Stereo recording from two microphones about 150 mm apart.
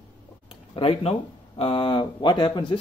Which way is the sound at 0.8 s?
35° left (ahead or behind).